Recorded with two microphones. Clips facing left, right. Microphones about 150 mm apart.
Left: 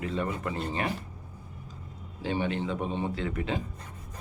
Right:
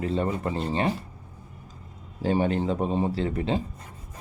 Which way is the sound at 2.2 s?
40° right (ahead or behind).